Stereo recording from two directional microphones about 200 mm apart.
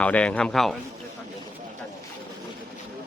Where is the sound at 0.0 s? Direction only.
5° left (ahead or behind).